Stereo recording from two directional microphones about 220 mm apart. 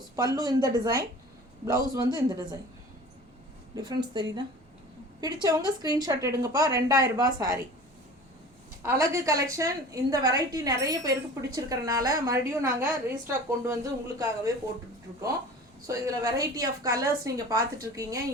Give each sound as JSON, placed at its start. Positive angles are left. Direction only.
{"t": 0.2, "sound": "a woman's voice", "side_deg": -20}
{"t": 3.8, "sound": "a woman's voice", "side_deg": -20}
{"t": 8.8, "sound": "a woman's voice", "side_deg": -15}
{"t": 15.9, "sound": "a woman's voice", "side_deg": -15}